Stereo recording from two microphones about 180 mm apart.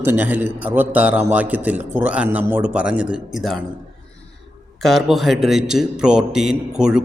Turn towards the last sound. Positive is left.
turn(degrees=-5)  # may be behind; listen again after turning